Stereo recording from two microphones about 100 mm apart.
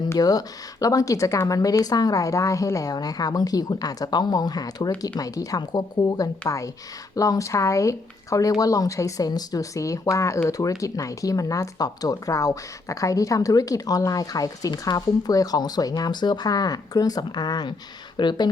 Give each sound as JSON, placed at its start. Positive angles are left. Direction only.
{"t": 0.2, "sound": "speech", "side_deg": 40}